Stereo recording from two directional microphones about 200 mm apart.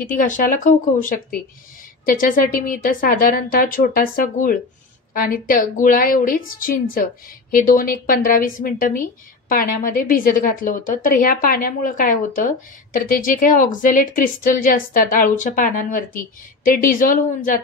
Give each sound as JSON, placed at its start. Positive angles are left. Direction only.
{"t": 0.0, "sound": "a woman's voice", "side_deg": 40}